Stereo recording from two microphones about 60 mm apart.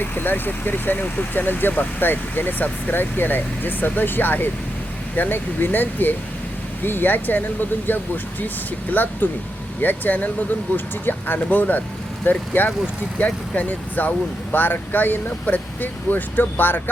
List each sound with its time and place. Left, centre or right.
0.0 s speech: left